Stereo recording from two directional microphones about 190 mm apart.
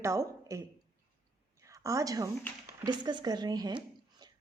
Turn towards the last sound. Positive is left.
turn(degrees=-20)  # may be behind; listen again after turning